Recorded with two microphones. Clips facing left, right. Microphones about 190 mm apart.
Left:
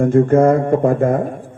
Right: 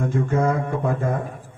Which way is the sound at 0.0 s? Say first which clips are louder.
Left 10 dB; 55° left (ahead or behind).